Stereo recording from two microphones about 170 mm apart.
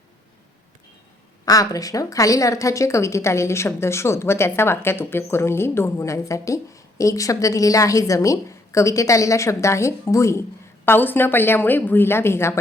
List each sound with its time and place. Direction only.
1.5 s a woman's voice: 20° left (ahead or behind)